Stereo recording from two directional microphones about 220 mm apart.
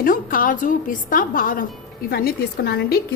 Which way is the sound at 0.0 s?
40° left (ahead or behind).